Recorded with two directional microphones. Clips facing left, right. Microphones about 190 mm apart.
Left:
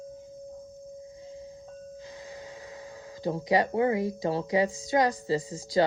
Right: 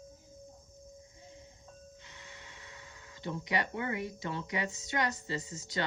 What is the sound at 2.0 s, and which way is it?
Speech, 35° left (ahead or behind).